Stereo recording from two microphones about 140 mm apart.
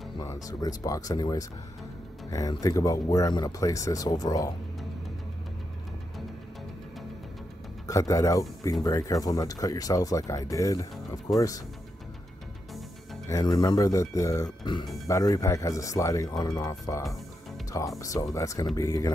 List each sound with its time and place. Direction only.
0.2 s speech: 25° left (ahead or behind)
7.8 s speech: 25° left (ahead or behind)
13.3 s speech: 30° left (ahead or behind)
15.0 s speech: 25° left (ahead or behind)